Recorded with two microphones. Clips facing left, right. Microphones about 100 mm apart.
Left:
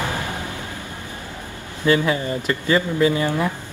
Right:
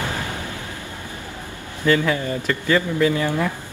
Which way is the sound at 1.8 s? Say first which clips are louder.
Even; 15° left (ahead or behind).